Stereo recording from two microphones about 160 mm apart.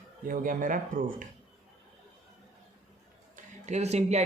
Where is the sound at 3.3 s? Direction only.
45° right (ahead or behind).